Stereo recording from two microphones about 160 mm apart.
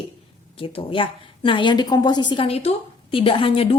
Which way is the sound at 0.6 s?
35° left (ahead or behind).